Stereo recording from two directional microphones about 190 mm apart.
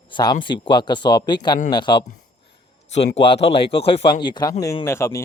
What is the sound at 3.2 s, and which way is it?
A man's voice, 30° left (ahead or behind).